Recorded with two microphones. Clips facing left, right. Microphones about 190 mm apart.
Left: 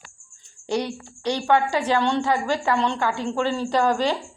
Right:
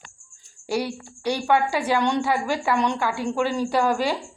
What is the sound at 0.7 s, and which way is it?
Speech, 5° right (ahead or behind).